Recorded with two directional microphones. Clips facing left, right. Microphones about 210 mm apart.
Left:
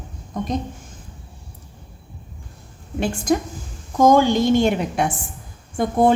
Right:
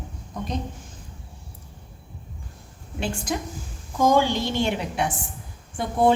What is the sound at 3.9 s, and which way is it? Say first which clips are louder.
A woman's voice: left 5 dB; 45° left (ahead or behind).